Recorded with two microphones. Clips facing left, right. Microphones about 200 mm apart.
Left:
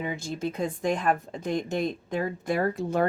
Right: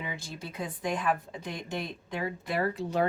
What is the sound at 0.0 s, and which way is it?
A woman's voice, 45° left (ahead or behind).